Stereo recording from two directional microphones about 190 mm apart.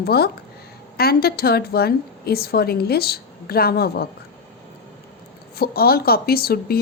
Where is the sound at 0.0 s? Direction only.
55° left (ahead or behind).